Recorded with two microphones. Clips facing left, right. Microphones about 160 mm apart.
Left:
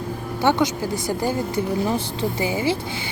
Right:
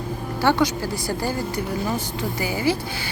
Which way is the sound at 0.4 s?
20° left (ahead or behind).